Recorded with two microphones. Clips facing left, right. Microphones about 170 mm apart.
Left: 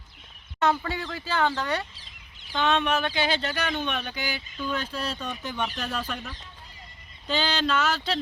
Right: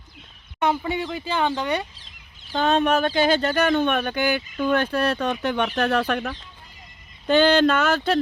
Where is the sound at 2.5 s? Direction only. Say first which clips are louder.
Right 5 dB; 40° right (ahead or behind).